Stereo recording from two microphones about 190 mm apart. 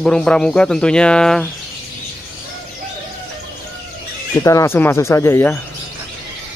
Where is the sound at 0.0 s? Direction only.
5° left (ahead or behind).